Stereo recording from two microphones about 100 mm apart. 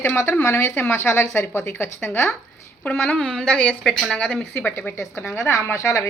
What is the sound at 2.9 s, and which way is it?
Speech, 5° left (ahead or behind).